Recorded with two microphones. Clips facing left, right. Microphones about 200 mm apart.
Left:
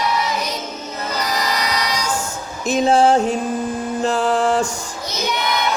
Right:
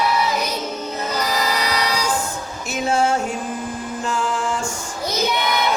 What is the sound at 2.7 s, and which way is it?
Music, 35° left (ahead or behind).